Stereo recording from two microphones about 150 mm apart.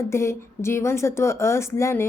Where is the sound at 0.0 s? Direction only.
20° left (ahead or behind).